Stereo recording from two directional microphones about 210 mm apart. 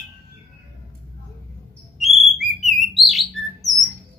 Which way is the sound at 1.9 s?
Centre (ahead or behind).